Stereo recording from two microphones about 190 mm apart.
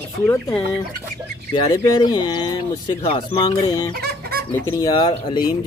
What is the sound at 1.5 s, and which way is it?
Speech, 25° left (ahead or behind).